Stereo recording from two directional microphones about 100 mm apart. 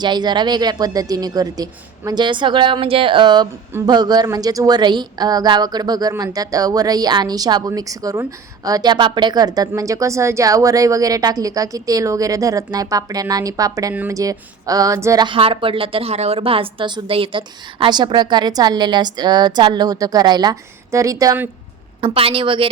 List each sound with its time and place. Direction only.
0.0 s a woman's voice: 45° right (ahead or behind)
2.8 s a woman's voice: 65° right (ahead or behind); by 15.2 s 35° right (ahead or behind)
15.2 s a woman's voice: 60° right (ahead or behind); by 20.6 s 45° right (ahead or behind)
20.9 s a woman's voice: 35° right (ahead or behind)
22.0 s a woman's voice: 65° right (ahead or behind)